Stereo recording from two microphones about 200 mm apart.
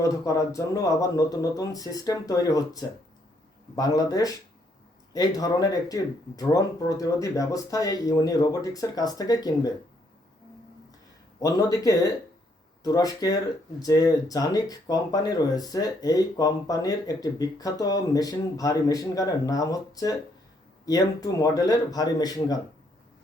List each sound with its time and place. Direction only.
0.0 s speech: 15° left (ahead or behind)
11.3 s speech: 15° left (ahead or behind)